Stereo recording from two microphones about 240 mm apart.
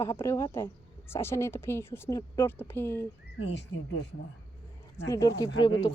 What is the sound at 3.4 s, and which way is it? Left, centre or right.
Speech, left.